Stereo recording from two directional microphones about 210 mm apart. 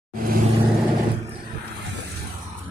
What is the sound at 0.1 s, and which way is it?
Vehicle, 45° right (ahead or behind).